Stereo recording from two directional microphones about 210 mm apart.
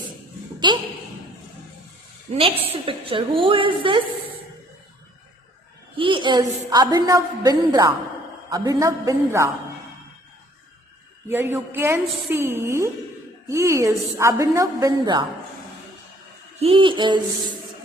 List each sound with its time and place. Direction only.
0.6 s a woman's voice: 20° right (ahead or behind)
2.3 s a woman's voice: 25° right (ahead or behind)
6.0 s a woman's voice: 25° right (ahead or behind)
11.3 s a woman's voice: 10° right (ahead or behind)
16.6 s a woman's voice: 25° right (ahead or behind)